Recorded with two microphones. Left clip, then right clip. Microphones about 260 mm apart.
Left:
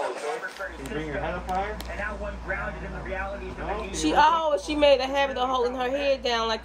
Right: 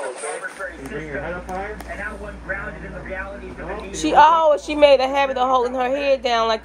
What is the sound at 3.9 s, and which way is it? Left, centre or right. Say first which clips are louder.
Speech: right 8 dB; centre.